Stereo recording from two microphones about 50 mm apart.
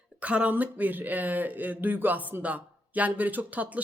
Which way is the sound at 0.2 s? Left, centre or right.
Right.